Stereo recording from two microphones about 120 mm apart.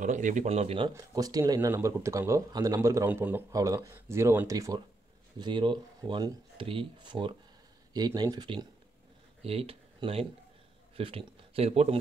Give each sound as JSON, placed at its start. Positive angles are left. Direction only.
{"t": 0.0, "sound": "speech", "side_deg": -90}
{"t": 0.9, "sound": "speech", "side_deg": -30}
{"t": 3.1, "sound": "a man's voice", "side_deg": -15}
{"t": 3.5, "sound": "speech", "side_deg": -30}
{"t": 5.4, "sound": "speech", "side_deg": -40}
{"t": 9.4, "sound": "speech", "side_deg": -55}